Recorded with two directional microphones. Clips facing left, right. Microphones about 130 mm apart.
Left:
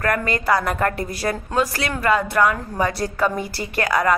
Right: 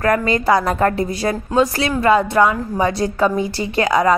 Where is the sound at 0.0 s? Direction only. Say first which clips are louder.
Right 5 dB; 25° right (ahead or behind).